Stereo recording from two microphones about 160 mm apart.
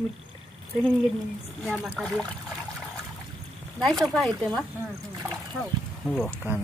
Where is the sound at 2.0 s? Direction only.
5° left (ahead or behind).